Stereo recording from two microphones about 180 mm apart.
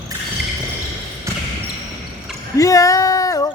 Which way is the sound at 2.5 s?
20° left (ahead or behind).